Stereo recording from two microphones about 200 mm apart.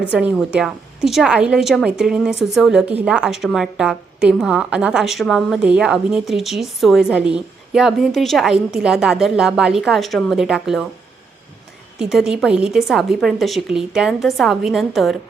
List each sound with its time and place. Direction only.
0.0 s a woman's voice: 5° right (ahead or behind)
11.9 s a woman's voice: 5° right (ahead or behind)